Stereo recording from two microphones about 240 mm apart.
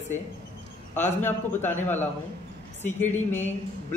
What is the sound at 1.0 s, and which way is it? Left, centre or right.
Speech, left.